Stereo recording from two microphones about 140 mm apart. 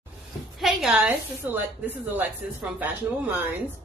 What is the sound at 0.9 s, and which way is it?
A woman's voice, 15° right (ahead or behind).